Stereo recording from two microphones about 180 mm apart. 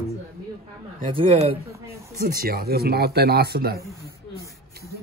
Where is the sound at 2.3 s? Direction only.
55° right (ahead or behind).